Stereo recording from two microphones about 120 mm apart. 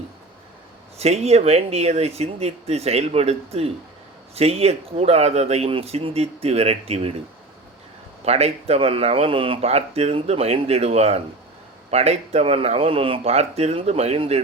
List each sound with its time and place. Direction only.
0.9 s speech: 60° right (ahead or behind)
8.2 s speech: 60° right (ahead or behind)